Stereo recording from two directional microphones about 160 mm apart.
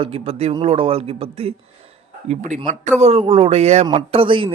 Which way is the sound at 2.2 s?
50° right (ahead or behind).